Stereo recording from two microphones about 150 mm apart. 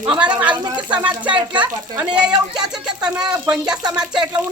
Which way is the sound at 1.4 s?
30° right (ahead or behind).